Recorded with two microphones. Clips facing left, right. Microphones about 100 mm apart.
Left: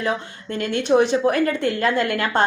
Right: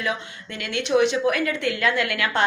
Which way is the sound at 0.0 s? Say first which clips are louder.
Left 4 dB; 40° left (ahead or behind).